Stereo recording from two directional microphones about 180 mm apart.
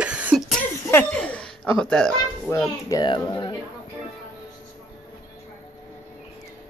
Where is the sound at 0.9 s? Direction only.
10° left (ahead or behind).